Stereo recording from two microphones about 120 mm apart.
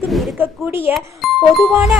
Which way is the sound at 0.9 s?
Centre (ahead or behind).